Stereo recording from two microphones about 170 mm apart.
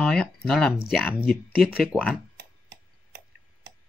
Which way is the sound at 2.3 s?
90° right.